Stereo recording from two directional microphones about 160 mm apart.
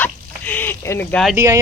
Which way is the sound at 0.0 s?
10° left (ahead or behind).